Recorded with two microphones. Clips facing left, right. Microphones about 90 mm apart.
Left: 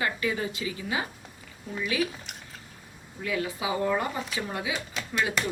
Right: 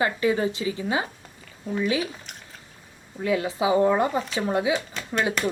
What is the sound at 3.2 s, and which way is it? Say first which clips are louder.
Speech: right 6 dB; 25° right (ahead or behind).